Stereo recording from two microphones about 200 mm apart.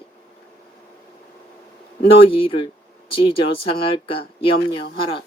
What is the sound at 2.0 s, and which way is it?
Speech, 25° left (ahead or behind).